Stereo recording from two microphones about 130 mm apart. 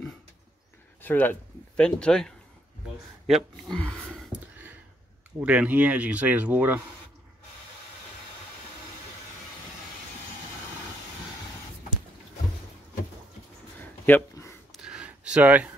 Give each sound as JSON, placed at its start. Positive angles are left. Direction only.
{"t": 1.0, "sound": "speech", "side_deg": 15}
{"t": 5.4, "sound": "speech", "side_deg": -10}
{"t": 13.7, "sound": "a sound", "side_deg": 15}
{"t": 14.7, "sound": "gasp", "side_deg": -5}